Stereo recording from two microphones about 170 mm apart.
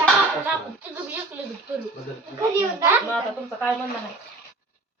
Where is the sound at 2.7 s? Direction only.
15° right (ahead or behind).